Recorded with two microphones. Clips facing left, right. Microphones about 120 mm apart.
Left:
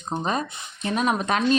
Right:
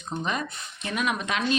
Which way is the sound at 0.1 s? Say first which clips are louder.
Left 4 dB; 35° left (ahead or behind).